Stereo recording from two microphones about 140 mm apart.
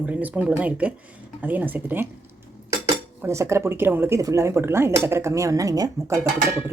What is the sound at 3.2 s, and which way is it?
Speech, 20° right (ahead or behind).